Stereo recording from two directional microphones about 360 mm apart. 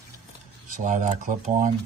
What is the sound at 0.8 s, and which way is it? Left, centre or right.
Speech, right.